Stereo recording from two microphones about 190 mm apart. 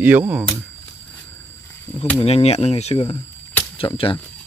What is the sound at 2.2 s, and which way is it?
Speech, 35° left (ahead or behind).